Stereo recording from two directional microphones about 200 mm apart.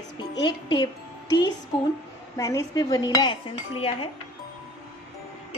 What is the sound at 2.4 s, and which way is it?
Speech, 15° left (ahead or behind).